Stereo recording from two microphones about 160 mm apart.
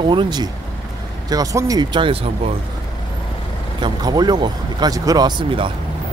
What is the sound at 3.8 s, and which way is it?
Speech, 25° right (ahead or behind).